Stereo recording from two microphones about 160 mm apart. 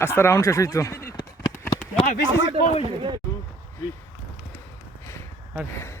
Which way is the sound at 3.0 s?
30° right (ahead or behind).